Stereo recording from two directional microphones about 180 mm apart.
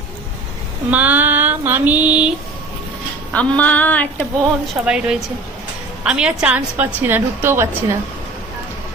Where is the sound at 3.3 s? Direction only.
5° left (ahead or behind).